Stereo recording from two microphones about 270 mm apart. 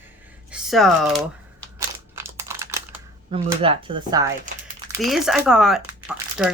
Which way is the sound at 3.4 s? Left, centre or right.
Centre.